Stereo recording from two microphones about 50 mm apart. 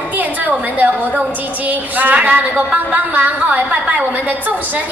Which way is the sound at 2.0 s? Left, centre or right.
Right.